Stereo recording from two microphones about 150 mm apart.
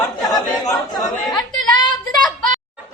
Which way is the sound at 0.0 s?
25° left (ahead or behind).